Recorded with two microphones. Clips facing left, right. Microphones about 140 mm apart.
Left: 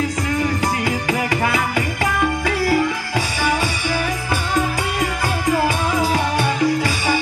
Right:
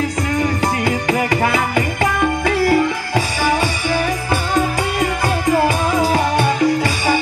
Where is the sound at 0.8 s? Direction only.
50° right (ahead or behind).